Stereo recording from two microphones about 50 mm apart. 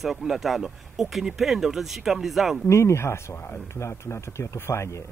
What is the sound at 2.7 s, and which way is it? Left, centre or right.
Speech, left.